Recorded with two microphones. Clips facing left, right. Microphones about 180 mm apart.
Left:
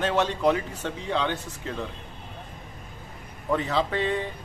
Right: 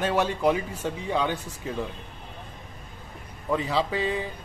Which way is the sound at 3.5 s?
5° right (ahead or behind).